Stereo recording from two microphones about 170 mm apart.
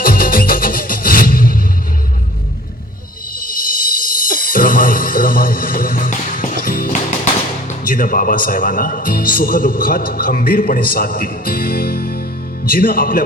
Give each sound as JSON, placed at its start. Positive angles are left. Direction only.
{"t": 0.0, "sound": "music", "side_deg": 55}
{"t": 3.4, "sound": "music", "side_deg": 55}
{"t": 7.7, "sound": "speech", "side_deg": 55}